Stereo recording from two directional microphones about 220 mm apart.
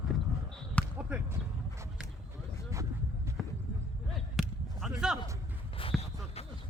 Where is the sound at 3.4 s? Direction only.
Centre (ahead or behind).